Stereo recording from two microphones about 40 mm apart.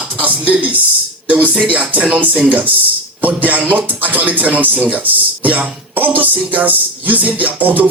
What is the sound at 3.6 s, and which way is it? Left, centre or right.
Speech, right.